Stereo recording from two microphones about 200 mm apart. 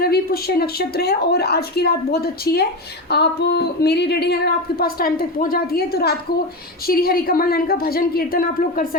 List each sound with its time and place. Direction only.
0.0 s a woman's voice: 50° left (ahead or behind)